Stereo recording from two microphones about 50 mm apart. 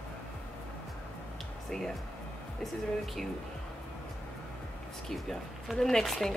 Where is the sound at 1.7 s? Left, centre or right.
Centre.